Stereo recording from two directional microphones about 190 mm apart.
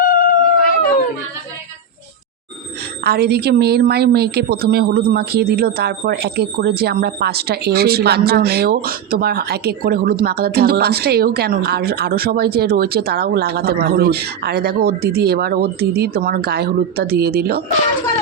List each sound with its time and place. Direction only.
0.0 s howl: 50° left (ahead or behind)
3.0 s a woman's voice: 55° right (ahead or behind)